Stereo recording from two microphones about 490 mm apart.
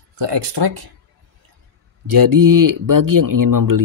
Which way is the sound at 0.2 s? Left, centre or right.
Right.